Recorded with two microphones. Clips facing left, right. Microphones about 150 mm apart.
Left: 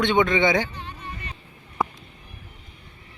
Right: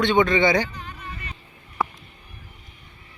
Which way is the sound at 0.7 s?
30° left (ahead or behind).